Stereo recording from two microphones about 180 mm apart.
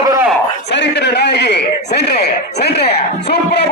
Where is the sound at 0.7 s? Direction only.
70° left (ahead or behind).